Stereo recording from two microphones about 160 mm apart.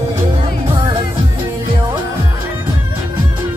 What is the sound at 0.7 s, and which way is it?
Music, 30° right (ahead or behind).